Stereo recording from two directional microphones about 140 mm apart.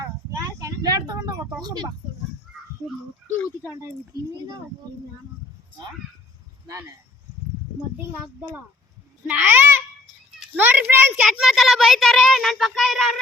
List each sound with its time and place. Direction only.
0.6 s speech: 30° right (ahead or behind)
9.2 s a child's voice: 15° right (ahead or behind)